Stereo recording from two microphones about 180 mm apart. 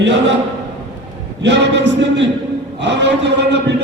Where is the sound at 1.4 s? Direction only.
75° right (ahead or behind).